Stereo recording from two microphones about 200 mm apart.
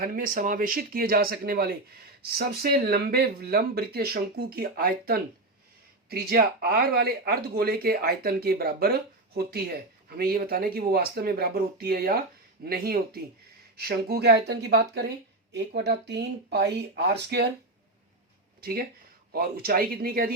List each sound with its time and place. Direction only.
0.0 s speech: 45° right (ahead or behind)
19.3 s speech: 50° right (ahead or behind)